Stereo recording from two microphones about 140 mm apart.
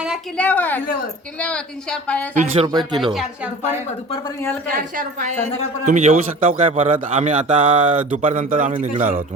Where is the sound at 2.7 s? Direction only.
30° right (ahead or behind).